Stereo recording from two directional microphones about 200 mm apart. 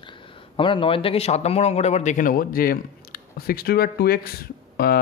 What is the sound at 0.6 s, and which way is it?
Speech, 25° left (ahead or behind).